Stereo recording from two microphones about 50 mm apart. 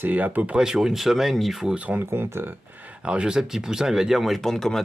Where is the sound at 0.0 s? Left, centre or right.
Right.